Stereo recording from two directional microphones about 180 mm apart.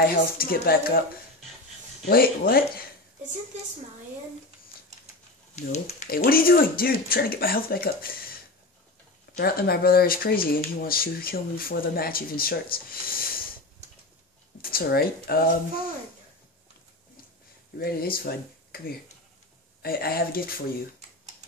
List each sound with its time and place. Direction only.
0.4 s speech: 55° left (ahead or behind)
2.0 s speech: 55° left (ahead or behind)
5.6 s speech: 40° left (ahead or behind)
6.0 s speech: 55° left (ahead or behind)
9.4 s speech: 60° left (ahead or behind)
14.6 s speech: 55° left (ahead or behind)
17.7 s speech: 55° left (ahead or behind)
19.8 s speech: 55° left (ahead or behind)